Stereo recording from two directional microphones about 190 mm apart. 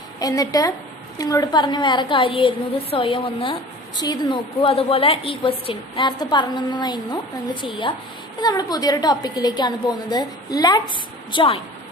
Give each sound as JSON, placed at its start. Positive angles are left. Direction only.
{"t": 0.2, "sound": "a woman's voice", "side_deg": 20}
{"t": 8.4, "sound": "a woman's voice", "side_deg": 20}